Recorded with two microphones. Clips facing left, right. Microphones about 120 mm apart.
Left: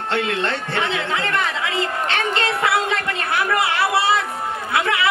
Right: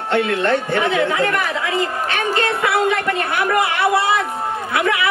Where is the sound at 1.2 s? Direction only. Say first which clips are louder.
Right 3 dB; 25° left (ahead or behind).